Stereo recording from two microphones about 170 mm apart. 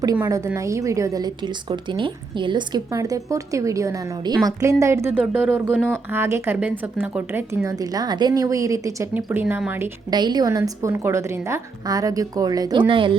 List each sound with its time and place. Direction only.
0.0 s a woman's voice: 20° right (ahead or behind)
10.1 s a woman's voice: 25° right (ahead or behind)